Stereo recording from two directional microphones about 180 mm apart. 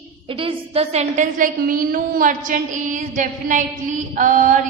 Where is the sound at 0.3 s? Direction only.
30° right (ahead or behind); by 3.0 s 45° right (ahead or behind).